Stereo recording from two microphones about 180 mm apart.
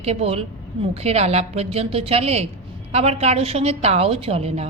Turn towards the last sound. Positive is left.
turn(degrees=-35)  # may be behind; listen again after turning